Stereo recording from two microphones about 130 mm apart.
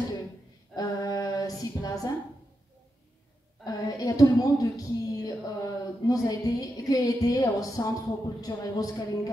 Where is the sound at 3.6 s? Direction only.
30° left (ahead or behind).